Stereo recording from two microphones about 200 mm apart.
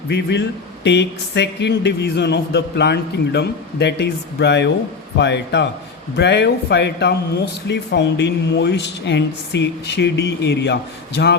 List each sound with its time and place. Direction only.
0.1 s speech: 60° left (ahead or behind)